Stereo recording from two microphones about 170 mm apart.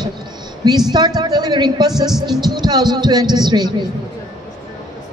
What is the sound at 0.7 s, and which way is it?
A woman's voice, 25° right (ahead or behind).